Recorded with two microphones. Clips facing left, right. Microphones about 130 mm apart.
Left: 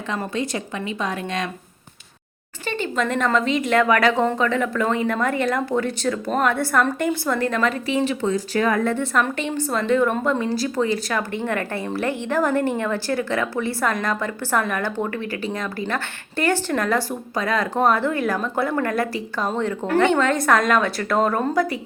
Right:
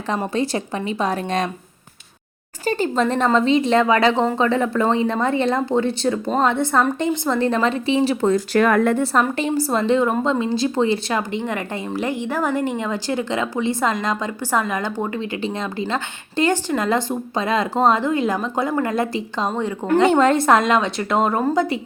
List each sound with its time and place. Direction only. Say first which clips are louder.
0.3 s a woman's voice: right 4 dB; 35° right (ahead or behind)
2.6 s speech: right 4 dB; 35° right (ahead or behind)
8.3 s speech: right 4 dB; 60° right (ahead or behind)
9.4 s a woman's voice: right 4 dB; 35° right (ahead or behind)
11.2 s speech: even; 15° right (ahead or behind)
20.1 s speech: right 6 dB; 35° right (ahead or behind)